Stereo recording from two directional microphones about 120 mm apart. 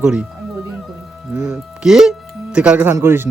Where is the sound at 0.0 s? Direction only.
10° right (ahead or behind).